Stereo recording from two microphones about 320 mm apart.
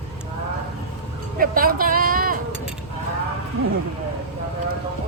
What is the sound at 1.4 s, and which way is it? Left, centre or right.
Speech, right.